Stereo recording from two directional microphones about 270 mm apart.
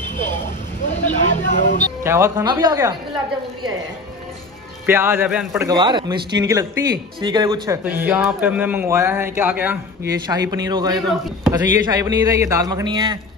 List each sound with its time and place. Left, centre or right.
1.2 s speech: left
2.0 s a man's voice: centre
4.8 s a man's voice: centre